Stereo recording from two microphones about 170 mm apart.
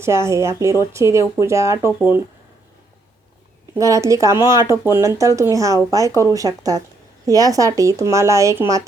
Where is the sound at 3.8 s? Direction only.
20° right (ahead or behind).